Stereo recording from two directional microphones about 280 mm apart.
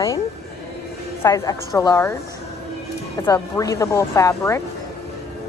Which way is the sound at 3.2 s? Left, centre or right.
Centre.